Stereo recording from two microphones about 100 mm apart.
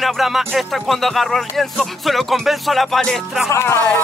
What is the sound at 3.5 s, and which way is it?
Speech, 30° left (ahead or behind).